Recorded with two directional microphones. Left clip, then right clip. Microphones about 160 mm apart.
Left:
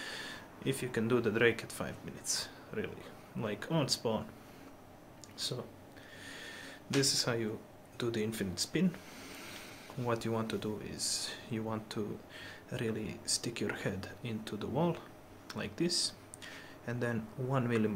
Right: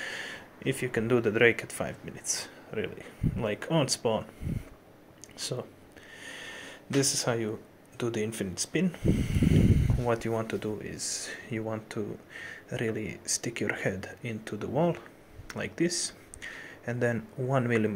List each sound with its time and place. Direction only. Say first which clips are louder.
0.0 s speech: right 6 dB; 15° right (ahead or behind)
6.2 s a sound: right 5 dB; 20° right (ahead or behind)
8.0 s speech: right 4 dB; 15° right (ahead or behind)